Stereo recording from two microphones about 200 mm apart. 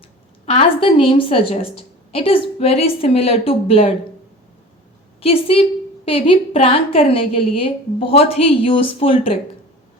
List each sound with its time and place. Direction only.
0.4 s a woman's voice: 30° left (ahead or behind)
5.2 s a woman's voice: 30° left (ahead or behind)